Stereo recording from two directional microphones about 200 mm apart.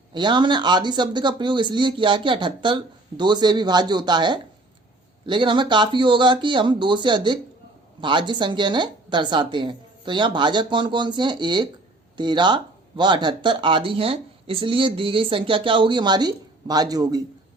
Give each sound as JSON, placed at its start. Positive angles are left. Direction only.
{"t": 0.1, "sound": "speech", "side_deg": -25}